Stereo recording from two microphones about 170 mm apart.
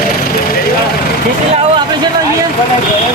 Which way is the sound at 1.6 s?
25° right (ahead or behind).